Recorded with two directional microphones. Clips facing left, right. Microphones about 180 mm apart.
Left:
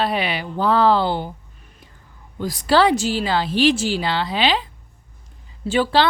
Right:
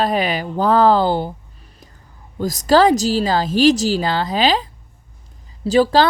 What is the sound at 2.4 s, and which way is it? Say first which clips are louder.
A woman's voice: right 3 dB; 40° right (ahead or behind).